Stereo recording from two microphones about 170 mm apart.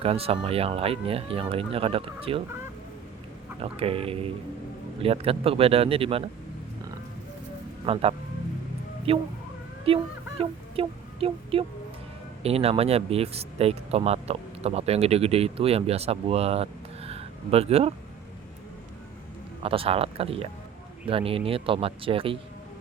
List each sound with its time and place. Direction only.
0.0 s speech: 35° right (ahead or behind)
3.6 s speech: 35° right (ahead or behind)
7.9 s speech: 35° right (ahead or behind)
9.1 s speech: 35° right (ahead or behind)
19.6 s speech: 35° right (ahead or behind)